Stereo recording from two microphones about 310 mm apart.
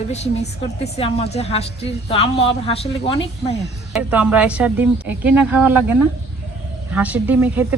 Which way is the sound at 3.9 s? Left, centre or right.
Centre.